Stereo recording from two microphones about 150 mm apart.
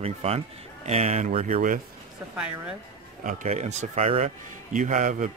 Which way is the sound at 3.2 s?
55° right (ahead or behind).